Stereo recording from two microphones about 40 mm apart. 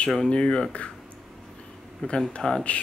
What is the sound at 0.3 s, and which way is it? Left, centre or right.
Speech, left.